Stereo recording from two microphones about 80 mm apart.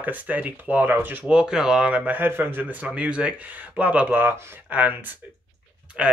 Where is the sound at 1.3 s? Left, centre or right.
Centre.